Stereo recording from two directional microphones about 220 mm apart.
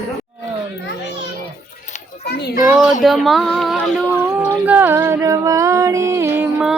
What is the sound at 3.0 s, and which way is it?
Speech, centre (ahead or behind).